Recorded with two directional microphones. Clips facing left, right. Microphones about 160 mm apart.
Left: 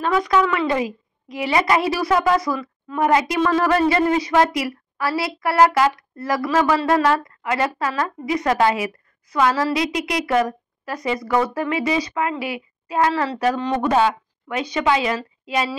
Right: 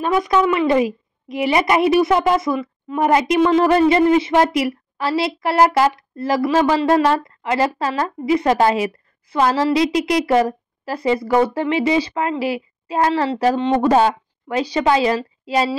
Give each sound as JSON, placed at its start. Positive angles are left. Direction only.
{"t": 0.0, "sound": "a woman's voice", "side_deg": -20}